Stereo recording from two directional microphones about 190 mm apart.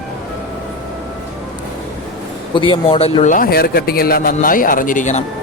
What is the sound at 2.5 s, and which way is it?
Speech, 25° left (ahead or behind).